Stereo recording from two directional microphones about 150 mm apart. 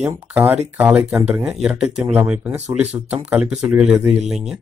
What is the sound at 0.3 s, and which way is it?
Speech, 20° right (ahead or behind).